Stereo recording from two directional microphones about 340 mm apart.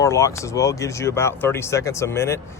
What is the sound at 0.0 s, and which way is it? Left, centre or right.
Speech, centre.